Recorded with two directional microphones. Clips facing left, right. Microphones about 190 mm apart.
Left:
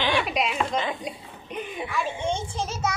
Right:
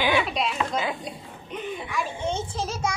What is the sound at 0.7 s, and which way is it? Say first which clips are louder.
Speech: even; 5° right (ahead or behind).